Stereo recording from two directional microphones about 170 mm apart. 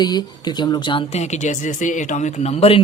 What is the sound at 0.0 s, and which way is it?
Speech, 25° left (ahead or behind).